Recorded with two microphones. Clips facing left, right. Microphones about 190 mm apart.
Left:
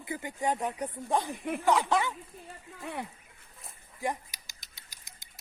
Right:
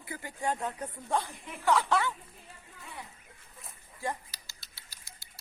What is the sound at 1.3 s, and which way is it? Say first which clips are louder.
Speech: left 12 dB; 55° left (ahead or behind).